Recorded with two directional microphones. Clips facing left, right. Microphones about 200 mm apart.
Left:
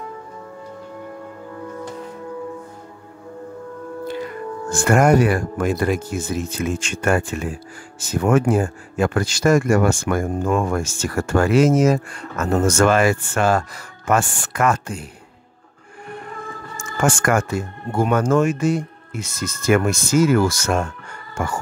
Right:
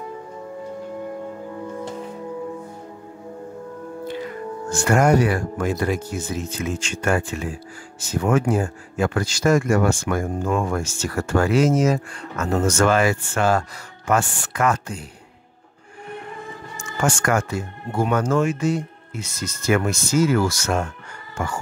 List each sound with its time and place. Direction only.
4.6 s speech: 50° left (ahead or behind)
16.7 s speech: 50° left (ahead or behind)